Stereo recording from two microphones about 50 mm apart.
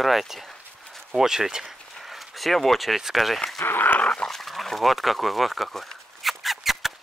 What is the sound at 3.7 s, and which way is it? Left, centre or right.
Dog, left.